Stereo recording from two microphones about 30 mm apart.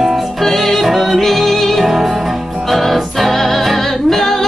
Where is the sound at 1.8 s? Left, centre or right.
Centre.